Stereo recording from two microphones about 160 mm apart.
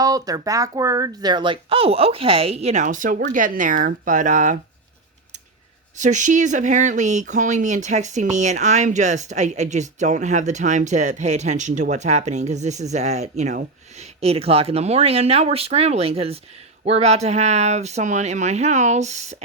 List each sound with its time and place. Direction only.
0.0 s speech: 25° right (ahead or behind); by 4.5 s 50° right (ahead or behind)
6.0 s speech: 50° right (ahead or behind)